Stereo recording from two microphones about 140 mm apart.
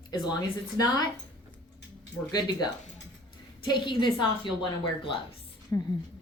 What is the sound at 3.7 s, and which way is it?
Speech, 35° left (ahead or behind).